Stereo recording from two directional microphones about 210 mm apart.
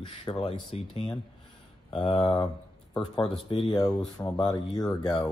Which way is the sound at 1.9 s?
20° left (ahead or behind).